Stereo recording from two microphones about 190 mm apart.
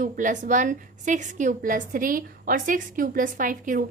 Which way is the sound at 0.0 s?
45° right (ahead or behind).